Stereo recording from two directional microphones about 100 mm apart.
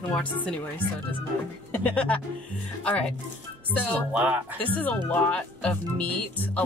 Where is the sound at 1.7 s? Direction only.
15° left (ahead or behind).